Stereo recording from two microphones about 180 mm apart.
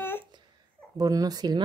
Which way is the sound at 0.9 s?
20° right (ahead or behind).